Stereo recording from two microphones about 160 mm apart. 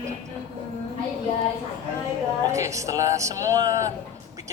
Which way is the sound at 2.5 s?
20° right (ahead or behind).